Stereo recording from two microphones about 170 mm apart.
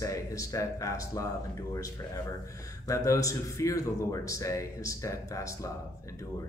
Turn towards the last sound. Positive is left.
turn(degrees=20)  # may be behind; listen again after turning